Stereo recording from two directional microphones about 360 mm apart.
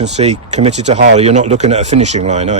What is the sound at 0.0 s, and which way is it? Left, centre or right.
Speech, centre.